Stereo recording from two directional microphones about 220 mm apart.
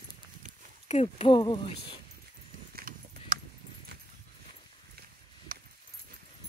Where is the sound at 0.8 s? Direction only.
30° left (ahead or behind).